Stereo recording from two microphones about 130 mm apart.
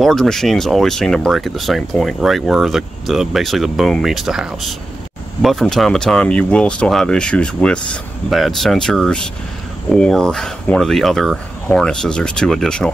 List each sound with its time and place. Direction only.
0.0 s speech: 5° left (ahead or behind)